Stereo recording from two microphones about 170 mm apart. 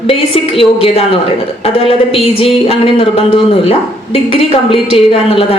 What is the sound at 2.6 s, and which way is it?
A woman's voice, 35° left (ahead or behind).